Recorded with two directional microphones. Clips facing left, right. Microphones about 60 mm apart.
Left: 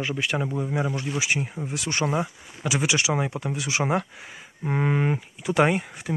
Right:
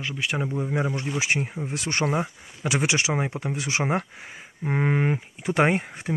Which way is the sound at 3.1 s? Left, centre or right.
Right.